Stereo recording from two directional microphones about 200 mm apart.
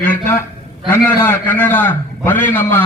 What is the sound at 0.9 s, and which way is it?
A man's voice, 10° left (ahead or behind).